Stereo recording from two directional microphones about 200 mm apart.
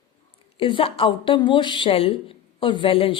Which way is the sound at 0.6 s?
25° left (ahead or behind).